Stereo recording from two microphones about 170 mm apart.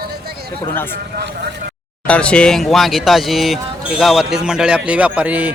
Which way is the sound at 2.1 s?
5° left (ahead or behind).